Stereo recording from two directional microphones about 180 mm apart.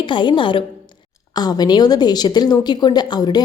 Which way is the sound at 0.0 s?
25° left (ahead or behind).